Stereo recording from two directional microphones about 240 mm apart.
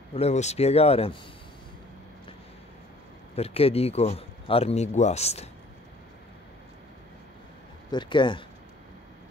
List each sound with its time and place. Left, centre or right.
0.1 s speech: left
3.3 s speech: left
7.9 s speech: centre